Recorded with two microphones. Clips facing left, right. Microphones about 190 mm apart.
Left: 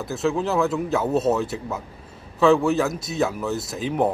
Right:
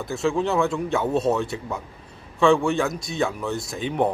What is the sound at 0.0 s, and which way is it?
Speech, centre (ahead or behind).